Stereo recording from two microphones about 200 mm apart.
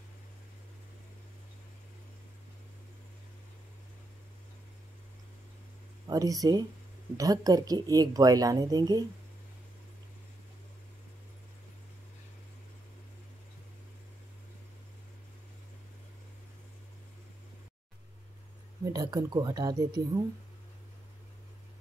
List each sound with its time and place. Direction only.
6.0 s speech: 15° right (ahead or behind)
18.9 s speech: 20° right (ahead or behind)